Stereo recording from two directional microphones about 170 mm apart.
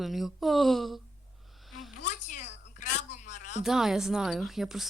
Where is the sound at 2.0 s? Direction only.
45° left (ahead or behind).